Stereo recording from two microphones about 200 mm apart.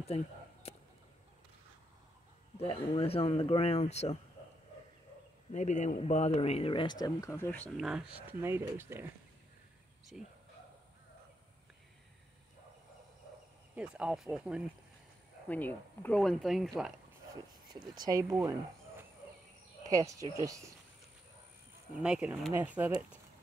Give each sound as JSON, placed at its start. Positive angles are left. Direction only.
{"t": 2.5, "sound": "speech", "side_deg": 30}
{"t": 5.5, "sound": "speech", "side_deg": 35}
{"t": 7.7, "sound": "speech", "side_deg": -5}
{"t": 10.1, "sound": "speech", "side_deg": 0}
{"t": 13.7, "sound": "speech", "side_deg": -5}
{"t": 15.4, "sound": "speech", "side_deg": 10}
{"t": 17.9, "sound": "speech", "side_deg": -20}
{"t": 19.9, "sound": "speech", "side_deg": -15}
{"t": 22.0, "sound": "speech", "side_deg": -5}